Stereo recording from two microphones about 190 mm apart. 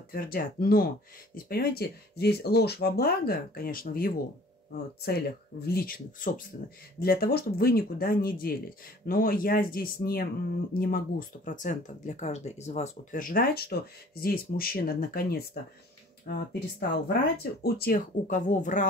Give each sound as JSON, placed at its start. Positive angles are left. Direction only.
{"t": 0.1, "sound": "speech", "side_deg": 50}
{"t": 5.7, "sound": "speech", "side_deg": 50}